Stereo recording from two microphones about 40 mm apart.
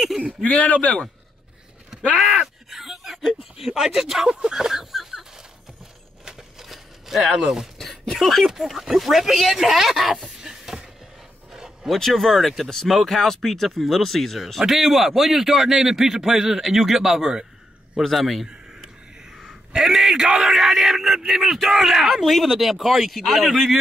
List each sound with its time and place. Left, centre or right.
0.3 s speech: left
2.4 s speech: centre
4.3 s a sound: right
6.2 s a sound: centre
6.7 s a sound: centre
7.4 s a man's voice: centre
7.8 s speech: centre
10.4 s a sound: centre
11.5 s dog: centre
12.0 s speech: centre
14.6 s a man's voice: centre
18.0 s speech: centre
19.8 s a man's voice: centre